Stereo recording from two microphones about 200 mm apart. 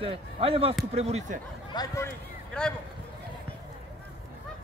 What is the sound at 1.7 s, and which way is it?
Speech, 15° left (ahead or behind).